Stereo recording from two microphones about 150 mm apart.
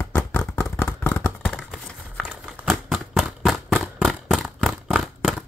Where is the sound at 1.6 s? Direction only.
5° right (ahead or behind).